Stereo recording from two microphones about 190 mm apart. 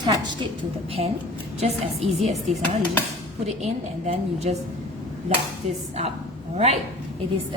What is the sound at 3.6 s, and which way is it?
Speech, 35° right (ahead or behind).